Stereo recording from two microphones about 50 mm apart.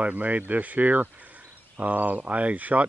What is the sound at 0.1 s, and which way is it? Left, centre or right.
Speech, right.